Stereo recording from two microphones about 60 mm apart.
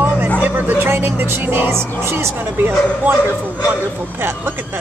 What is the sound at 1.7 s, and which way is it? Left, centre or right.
Speech, right.